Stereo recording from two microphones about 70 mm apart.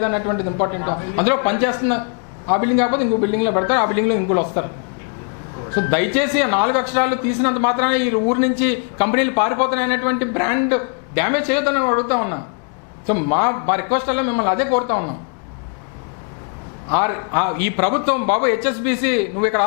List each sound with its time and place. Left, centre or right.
0.0 s speech: left
5.8 s speech: centre
16.9 s speech: left